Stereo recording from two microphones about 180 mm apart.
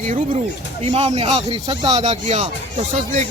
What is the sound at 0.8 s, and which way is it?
Speech, 35° right (ahead or behind).